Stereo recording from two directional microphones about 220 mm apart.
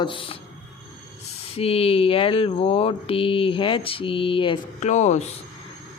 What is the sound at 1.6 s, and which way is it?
Speech, 25° left (ahead or behind).